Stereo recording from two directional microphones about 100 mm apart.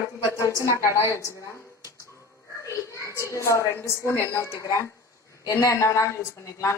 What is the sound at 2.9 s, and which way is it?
A woman's voice, 30° left (ahead or behind).